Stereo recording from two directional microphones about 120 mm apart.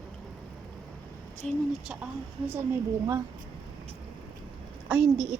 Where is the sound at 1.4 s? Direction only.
5° left (ahead or behind).